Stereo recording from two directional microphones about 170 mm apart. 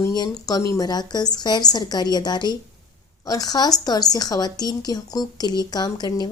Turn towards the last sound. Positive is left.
turn(degrees=25)  # may be behind; listen again after turning